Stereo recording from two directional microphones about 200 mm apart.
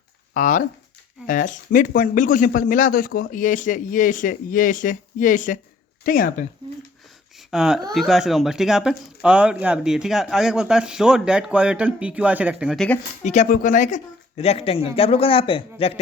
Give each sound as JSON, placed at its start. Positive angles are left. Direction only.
{"t": 0.3, "sound": "speech", "side_deg": 40}
{"t": 7.5, "sound": "speech", "side_deg": -5}
{"t": 13.2, "sound": "speech", "side_deg": 40}